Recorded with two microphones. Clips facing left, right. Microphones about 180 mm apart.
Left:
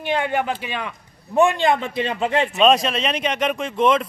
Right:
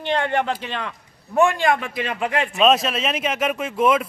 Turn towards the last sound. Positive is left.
turn(degrees=-5)  # may be behind; listen again after turning